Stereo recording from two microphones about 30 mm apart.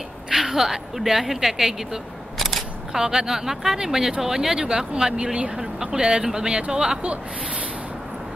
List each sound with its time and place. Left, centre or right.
0.3 s speech: centre
2.3 s single-lens reflex camera: centre
2.9 s a woman's voice: centre; by 5.5 s right
5.6 s speech: right